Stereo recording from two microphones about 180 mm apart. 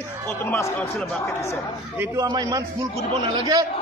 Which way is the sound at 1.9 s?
15° right (ahead or behind).